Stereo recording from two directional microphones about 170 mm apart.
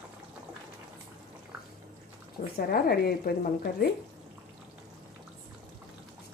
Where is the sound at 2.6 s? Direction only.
60° left (ahead or behind).